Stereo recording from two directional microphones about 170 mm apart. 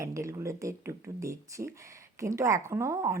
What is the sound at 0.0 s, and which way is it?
Speech, 20° right (ahead or behind).